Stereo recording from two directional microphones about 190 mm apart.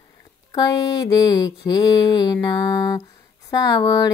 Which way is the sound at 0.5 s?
20° left (ahead or behind).